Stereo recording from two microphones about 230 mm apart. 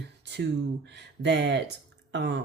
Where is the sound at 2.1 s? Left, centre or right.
Right.